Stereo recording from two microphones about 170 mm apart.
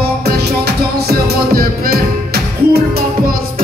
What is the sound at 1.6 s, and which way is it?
Music, 65° right (ahead or behind).